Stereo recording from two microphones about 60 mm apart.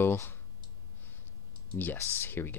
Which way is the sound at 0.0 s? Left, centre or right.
Left.